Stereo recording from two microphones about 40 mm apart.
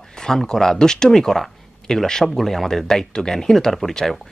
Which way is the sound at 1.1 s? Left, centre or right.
Centre.